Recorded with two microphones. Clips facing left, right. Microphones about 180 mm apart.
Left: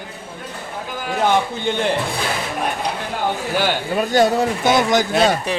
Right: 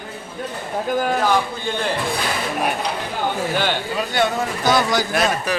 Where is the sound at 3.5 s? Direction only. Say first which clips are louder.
Left 3 dB; 10° left (ahead or behind).